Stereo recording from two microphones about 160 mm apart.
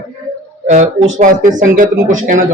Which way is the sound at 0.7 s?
50° right (ahead or behind).